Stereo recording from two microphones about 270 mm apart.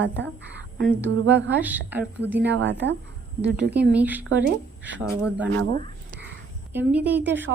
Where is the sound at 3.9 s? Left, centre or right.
Centre.